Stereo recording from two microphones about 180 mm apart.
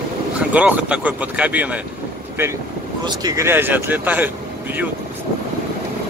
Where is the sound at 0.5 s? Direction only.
10° right (ahead or behind).